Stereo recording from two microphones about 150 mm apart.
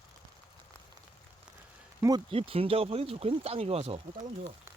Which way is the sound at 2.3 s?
40° right (ahead or behind).